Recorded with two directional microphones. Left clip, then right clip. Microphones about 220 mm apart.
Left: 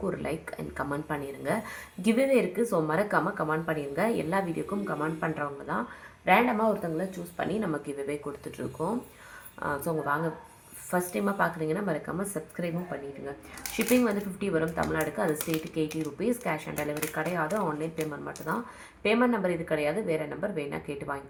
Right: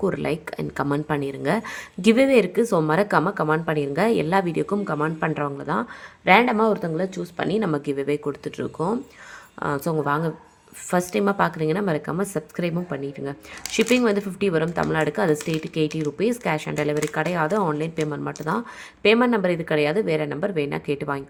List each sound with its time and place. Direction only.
0.0 s speech: 50° right (ahead or behind)